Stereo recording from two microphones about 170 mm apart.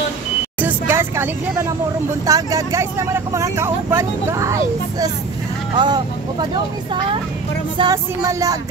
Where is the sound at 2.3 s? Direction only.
20° right (ahead or behind).